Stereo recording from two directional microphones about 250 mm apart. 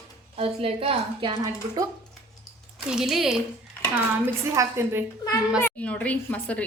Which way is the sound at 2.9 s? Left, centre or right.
Centre.